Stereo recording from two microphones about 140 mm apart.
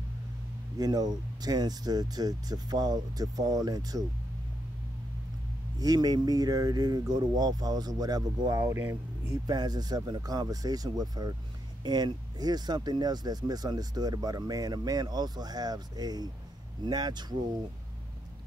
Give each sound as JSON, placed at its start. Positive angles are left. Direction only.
{"t": 0.7, "sound": "speech", "side_deg": -30}
{"t": 5.8, "sound": "speech", "side_deg": -30}